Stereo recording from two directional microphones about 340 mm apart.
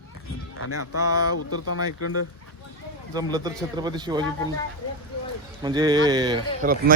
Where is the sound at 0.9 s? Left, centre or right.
Centre.